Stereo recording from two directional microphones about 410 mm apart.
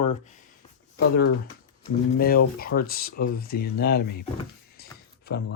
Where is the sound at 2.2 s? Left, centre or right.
Left.